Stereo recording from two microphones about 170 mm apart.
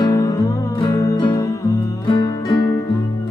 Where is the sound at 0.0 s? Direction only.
20° left (ahead or behind).